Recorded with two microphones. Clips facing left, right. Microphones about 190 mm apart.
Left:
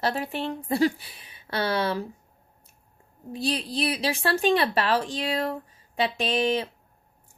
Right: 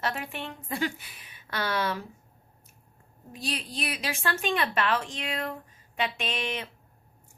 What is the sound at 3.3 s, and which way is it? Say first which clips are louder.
A woman's voice: left 7 dB; 35° left (ahead or behind).